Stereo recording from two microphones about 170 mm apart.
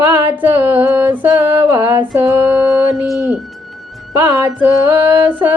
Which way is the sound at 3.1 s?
Centre (ahead or behind).